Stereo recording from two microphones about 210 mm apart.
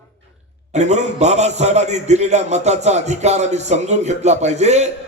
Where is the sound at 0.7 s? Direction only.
30° right (ahead or behind).